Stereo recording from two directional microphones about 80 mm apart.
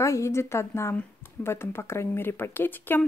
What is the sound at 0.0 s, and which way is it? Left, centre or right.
A woman's voice, left.